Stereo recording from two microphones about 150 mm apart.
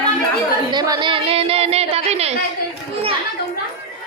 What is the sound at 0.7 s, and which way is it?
Speech, 30° right (ahead or behind).